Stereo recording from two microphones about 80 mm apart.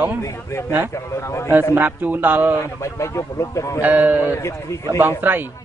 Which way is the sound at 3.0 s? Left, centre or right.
Left.